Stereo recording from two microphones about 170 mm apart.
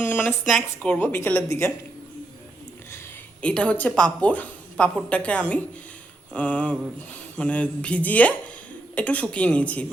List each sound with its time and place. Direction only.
0.0 s speech: 10° left (ahead or behind)
3.4 s speech: 5° left (ahead or behind)